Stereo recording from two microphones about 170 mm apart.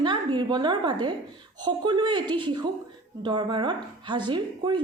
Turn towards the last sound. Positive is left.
turn(degrees=-25)  # may be behind; listen again after turning